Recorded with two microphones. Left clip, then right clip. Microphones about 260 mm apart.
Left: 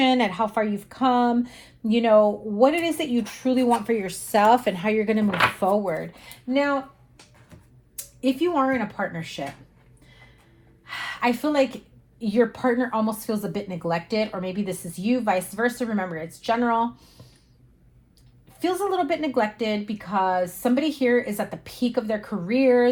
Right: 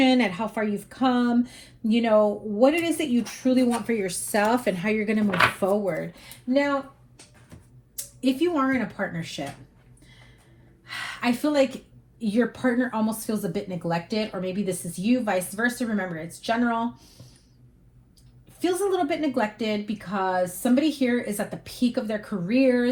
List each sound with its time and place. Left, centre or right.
0.0 s speech: left
9.0 s speech: left
11.2 s speech: left
18.6 s speech: left